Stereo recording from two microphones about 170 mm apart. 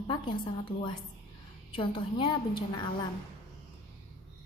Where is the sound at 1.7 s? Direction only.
30° left (ahead or behind).